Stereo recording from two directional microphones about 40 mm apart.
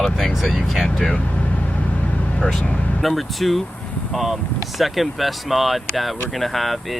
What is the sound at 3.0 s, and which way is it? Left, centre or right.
Speech, centre.